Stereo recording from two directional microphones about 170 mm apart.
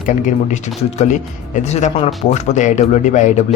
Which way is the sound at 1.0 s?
45° left (ahead or behind).